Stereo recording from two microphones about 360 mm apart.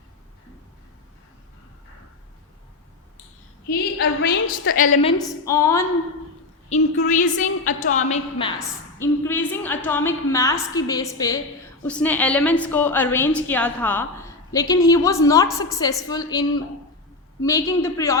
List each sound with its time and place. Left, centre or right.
3.7 s a woman's voice: left; by 5.8 s centre
6.7 s a woman's voice: centre
8.5 s a woman's voice: centre